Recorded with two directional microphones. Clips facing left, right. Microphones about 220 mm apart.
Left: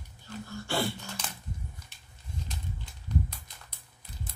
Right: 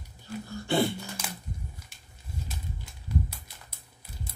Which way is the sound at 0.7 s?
20° right (ahead or behind).